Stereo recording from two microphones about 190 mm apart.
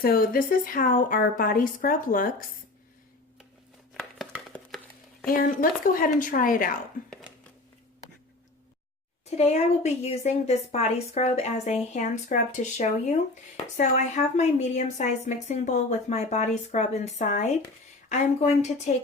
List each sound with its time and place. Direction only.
0.0 s a woman's voice: 50° left (ahead or behind)
3.9 s chopping: centre (ahead or behind)
5.2 s a woman's voice: 45° left (ahead or behind)
9.4 s a woman's voice: 35° left (ahead or behind)